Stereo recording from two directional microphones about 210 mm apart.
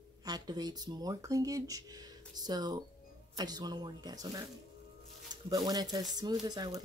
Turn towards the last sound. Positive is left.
turn(degrees=-20)  # may be behind; listen again after turning